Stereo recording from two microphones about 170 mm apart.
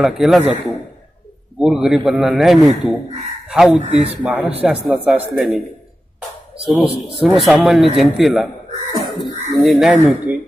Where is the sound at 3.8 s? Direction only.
40° right (ahead or behind).